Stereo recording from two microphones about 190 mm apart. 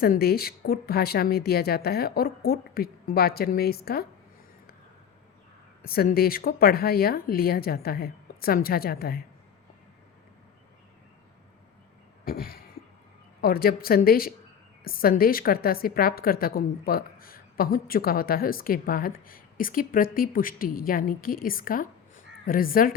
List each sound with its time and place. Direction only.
0.0 s a woman's voice: 55° left (ahead or behind)
5.8 s a woman's voice: 50° left (ahead or behind)
12.2 s a sound: 50° left (ahead or behind)
13.4 s a woman's voice: 50° left (ahead or behind)